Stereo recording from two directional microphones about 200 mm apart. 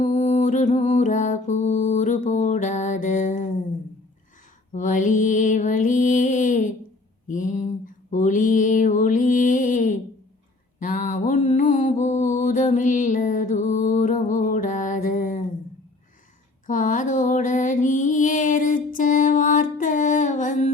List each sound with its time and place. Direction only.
0.0 s music: 35° left (ahead or behind)
4.7 s mantra: 40° left (ahead or behind)
7.3 s a sound: 40° left (ahead or behind)
8.1 s mantra: 40° left (ahead or behind)
16.6 s mantra: 40° left (ahead or behind)